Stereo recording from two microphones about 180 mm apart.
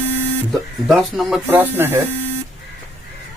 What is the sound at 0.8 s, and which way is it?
Speech, centre (ahead or behind).